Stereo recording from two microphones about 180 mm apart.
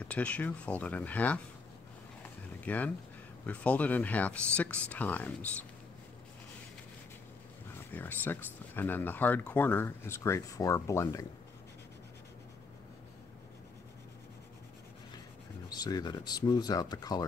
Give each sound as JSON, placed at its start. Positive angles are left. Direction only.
{"t": 0.0, "sound": "speech", "side_deg": 5}
{"t": 2.6, "sound": "speech", "side_deg": 10}
{"t": 7.9, "sound": "speech", "side_deg": 10}
{"t": 15.7, "sound": "speech", "side_deg": 20}